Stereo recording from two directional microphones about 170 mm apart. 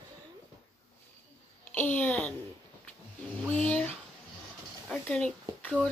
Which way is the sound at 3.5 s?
5° left (ahead or behind).